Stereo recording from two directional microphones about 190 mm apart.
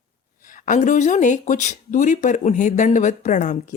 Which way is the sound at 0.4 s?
40° left (ahead or behind).